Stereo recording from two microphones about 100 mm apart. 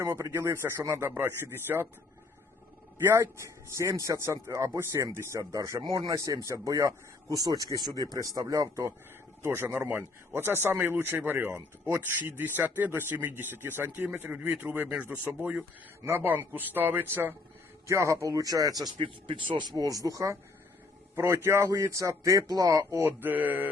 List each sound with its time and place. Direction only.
0.0 s speech: 25° right (ahead or behind)
3.0 s speech: 25° right (ahead or behind)
15.1 s mantra: 15° right (ahead or behind)
16.0 s speech: 20° right (ahead or behind)
17.8 s speech: 30° right (ahead or behind)
18.9 s speech: 55° right (ahead or behind)
19.7 s speech: 35° right (ahead or behind)
23.0 s mantra: 20° right (ahead or behind)